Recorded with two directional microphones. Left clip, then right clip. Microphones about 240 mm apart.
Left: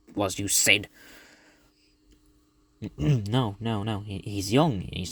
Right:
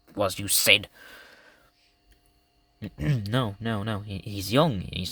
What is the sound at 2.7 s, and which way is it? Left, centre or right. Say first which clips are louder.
Speech: left 3 dB; centre.